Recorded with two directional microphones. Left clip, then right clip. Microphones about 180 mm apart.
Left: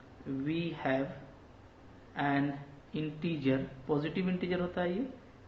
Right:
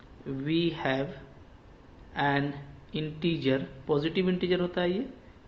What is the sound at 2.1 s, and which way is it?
A man's voice, 40° right (ahead or behind).